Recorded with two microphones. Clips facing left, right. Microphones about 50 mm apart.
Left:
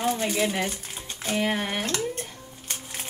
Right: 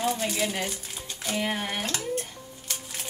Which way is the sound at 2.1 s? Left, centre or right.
Centre.